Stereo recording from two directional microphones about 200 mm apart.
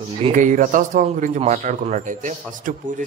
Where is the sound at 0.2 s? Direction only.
40° right (ahead or behind).